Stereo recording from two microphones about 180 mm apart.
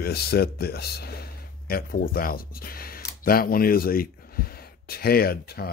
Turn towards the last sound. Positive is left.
turn(degrees=60)  # may be behind; listen again after turning